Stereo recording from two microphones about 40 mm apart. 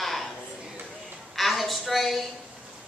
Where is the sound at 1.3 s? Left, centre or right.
Centre.